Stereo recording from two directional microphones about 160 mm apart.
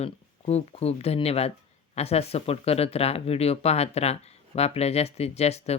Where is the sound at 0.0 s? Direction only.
40° left (ahead or behind).